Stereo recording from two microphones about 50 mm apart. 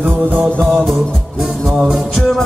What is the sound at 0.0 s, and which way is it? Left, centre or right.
Music, right.